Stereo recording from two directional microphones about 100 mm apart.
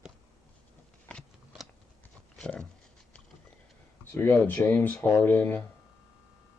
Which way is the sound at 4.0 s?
20° left (ahead or behind).